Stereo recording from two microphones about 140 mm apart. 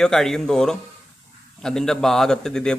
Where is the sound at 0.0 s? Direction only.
5° left (ahead or behind).